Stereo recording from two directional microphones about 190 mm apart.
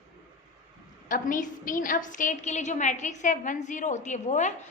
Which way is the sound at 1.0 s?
45° left (ahead or behind).